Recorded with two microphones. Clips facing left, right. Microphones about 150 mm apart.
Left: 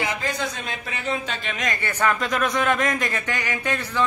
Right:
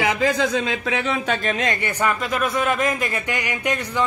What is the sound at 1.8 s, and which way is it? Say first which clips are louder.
A man's voice: right 1 dB; 10° right (ahead or behind).